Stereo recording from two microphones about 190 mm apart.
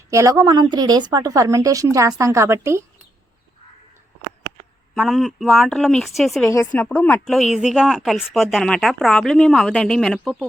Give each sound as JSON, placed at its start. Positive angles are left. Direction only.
{"t": 0.1, "sound": "a woman's voice", "side_deg": -15}
{"t": 4.9, "sound": "speech", "side_deg": 0}
{"t": 6.5, "sound": "speech", "side_deg": 15}